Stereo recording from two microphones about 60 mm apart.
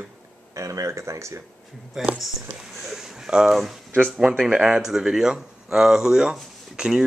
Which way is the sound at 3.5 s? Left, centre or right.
Centre.